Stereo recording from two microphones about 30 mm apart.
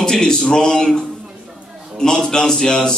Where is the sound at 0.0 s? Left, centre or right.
Left.